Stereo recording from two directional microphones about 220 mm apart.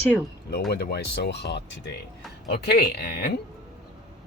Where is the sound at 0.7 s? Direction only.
45° left (ahead or behind).